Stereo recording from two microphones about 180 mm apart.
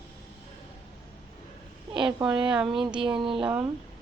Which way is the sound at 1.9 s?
25° right (ahead or behind).